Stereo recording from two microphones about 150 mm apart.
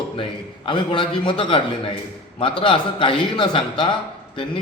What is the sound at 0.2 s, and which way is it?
A man's voice, 35° left (ahead or behind).